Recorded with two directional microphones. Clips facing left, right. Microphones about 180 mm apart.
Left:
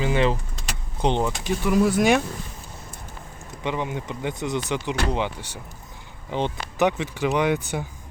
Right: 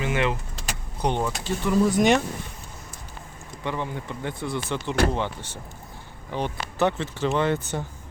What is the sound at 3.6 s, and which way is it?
Speech, 20° left (ahead or behind).